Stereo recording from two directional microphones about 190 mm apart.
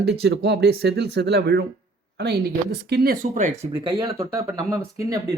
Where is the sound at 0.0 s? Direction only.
60° right (ahead or behind); by 3.7 s 40° right (ahead or behind).